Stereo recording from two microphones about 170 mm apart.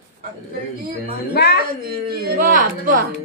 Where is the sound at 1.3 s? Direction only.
75° left (ahead or behind).